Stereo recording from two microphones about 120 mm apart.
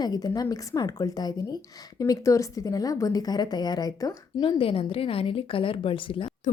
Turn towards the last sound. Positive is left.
turn(degrees=45)  # may be behind; listen again after turning